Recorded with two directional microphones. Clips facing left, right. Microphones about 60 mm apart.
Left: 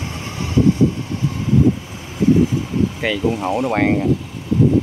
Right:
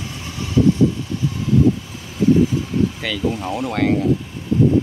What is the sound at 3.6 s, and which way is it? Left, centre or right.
Speech, left.